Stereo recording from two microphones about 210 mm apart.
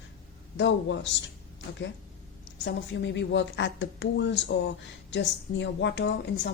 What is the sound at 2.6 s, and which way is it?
Speech, 55° left (ahead or behind).